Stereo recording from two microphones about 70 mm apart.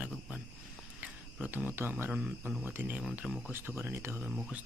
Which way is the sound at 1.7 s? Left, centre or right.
Right.